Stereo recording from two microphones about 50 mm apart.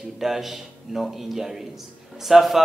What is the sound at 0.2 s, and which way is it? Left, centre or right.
A man's voice, centre.